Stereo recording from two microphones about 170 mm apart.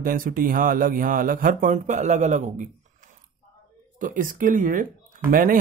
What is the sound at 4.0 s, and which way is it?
Speech, 50° right (ahead or behind).